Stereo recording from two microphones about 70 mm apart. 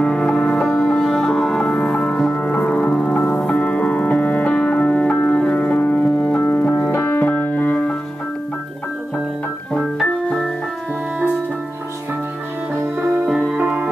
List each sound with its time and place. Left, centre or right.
0.0 s music: centre
6.7 s music: left
9.9 s keyboard: centre
13.3 s music: centre